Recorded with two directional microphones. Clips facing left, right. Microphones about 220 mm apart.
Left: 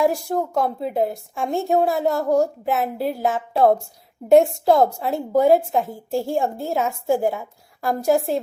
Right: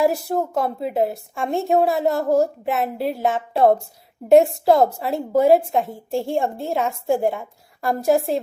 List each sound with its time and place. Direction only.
0.0 s a woman's voice: 5° right (ahead or behind)